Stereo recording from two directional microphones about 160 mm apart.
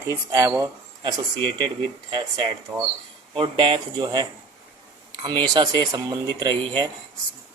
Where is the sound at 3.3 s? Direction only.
35° right (ahead or behind).